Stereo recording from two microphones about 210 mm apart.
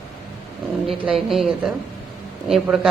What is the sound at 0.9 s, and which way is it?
A woman's voice, centre (ahead or behind).